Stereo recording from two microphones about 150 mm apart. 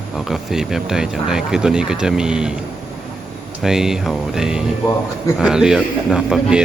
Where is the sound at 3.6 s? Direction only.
5° right (ahead or behind).